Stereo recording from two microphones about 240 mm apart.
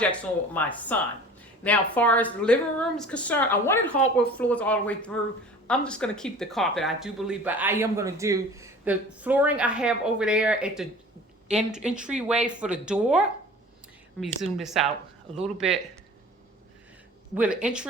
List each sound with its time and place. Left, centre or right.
0.0 s speech: centre
17.3 s speech: centre